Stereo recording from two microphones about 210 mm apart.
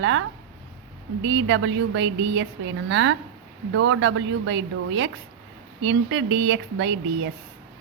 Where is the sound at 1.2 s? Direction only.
60° right (ahead or behind).